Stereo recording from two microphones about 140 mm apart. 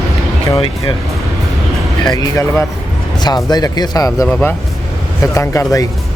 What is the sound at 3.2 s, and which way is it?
Speech, 30° left (ahead or behind).